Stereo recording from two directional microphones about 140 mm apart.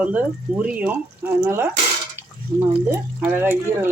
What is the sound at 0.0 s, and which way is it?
Speech, 10° right (ahead or behind).